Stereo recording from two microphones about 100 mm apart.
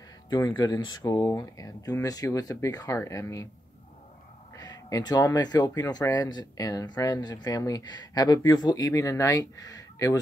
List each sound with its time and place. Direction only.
0.6 s speech: 45° left (ahead or behind)
4.6 s speech: 40° left (ahead or behind)